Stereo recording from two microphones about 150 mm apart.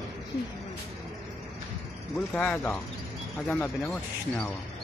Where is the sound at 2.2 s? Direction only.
10° left (ahead or behind).